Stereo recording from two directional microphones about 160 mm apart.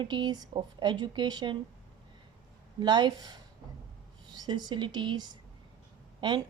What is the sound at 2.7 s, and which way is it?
A woman's voice, 25° right (ahead or behind).